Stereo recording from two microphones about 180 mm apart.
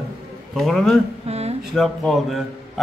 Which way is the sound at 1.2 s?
35° right (ahead or behind).